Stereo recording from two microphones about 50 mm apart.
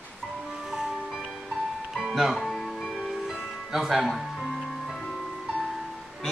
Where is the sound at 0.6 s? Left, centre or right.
Centre.